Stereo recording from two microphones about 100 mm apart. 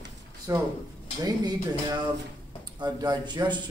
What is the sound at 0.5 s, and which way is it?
A man's voice, 35° right (ahead or behind).